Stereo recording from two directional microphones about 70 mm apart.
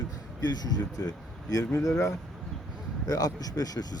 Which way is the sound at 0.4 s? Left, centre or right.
Left.